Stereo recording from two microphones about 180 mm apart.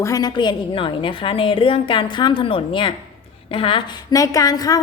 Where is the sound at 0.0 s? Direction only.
20° left (ahead or behind).